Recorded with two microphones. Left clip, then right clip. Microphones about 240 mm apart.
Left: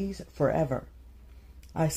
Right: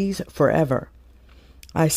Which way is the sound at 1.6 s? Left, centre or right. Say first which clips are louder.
Right 8 dB; right.